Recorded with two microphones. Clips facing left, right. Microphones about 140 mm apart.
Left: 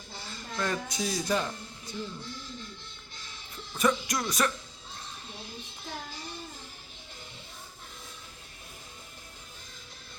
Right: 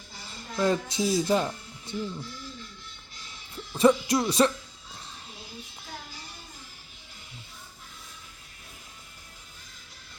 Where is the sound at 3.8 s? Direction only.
30° right (ahead or behind).